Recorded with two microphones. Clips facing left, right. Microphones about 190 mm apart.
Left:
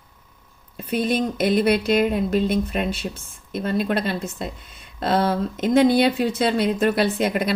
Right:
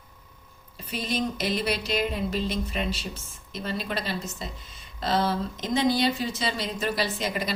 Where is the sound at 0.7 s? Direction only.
55° left (ahead or behind).